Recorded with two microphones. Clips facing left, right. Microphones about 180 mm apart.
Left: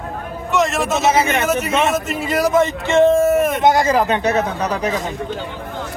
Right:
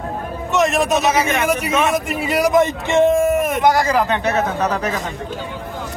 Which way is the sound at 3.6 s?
20° left (ahead or behind).